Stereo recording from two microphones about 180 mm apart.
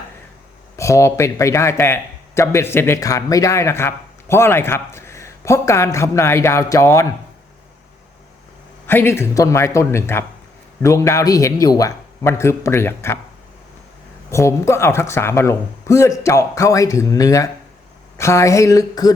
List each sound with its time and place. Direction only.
0.8 s a man's voice: 15° left (ahead or behind)
8.9 s a man's voice: 15° left (ahead or behind)
14.3 s a man's voice: 15° left (ahead or behind)